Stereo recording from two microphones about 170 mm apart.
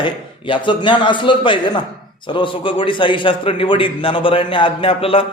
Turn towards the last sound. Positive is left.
turn(degrees=35)  # may be behind; listen again after turning